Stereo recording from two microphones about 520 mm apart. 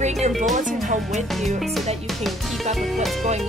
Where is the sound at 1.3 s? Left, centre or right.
Centre.